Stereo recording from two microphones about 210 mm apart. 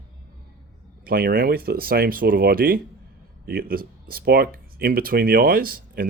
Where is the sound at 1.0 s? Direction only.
45° right (ahead or behind).